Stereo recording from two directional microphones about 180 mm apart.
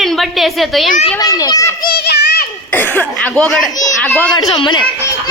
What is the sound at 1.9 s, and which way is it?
Children playing, 65° left (ahead or behind).